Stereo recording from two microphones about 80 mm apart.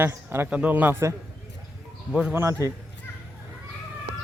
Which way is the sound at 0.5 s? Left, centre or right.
Centre.